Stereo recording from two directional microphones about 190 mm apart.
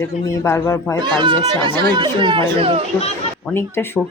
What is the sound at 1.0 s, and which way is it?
Speech, 25° right (ahead or behind).